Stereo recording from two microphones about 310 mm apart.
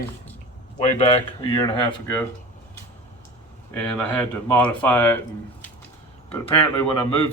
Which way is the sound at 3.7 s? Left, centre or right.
Centre.